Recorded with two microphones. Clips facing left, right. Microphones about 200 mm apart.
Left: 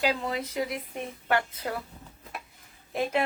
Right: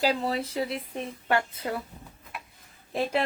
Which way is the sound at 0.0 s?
35° right (ahead or behind).